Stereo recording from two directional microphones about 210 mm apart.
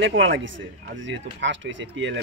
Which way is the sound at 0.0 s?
60° right (ahead or behind).